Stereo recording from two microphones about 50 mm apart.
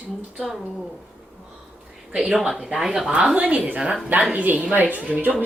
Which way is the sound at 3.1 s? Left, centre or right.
Right.